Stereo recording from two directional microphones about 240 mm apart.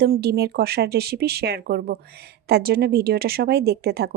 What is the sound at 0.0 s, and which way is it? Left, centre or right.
Speech, right.